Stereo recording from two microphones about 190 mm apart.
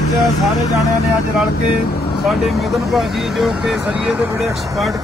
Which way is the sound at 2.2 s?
Centre (ahead or behind).